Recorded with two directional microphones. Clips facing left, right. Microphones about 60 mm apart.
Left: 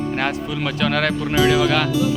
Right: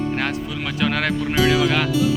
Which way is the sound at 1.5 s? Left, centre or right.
Right.